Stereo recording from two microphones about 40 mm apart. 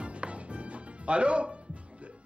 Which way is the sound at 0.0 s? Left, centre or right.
Right.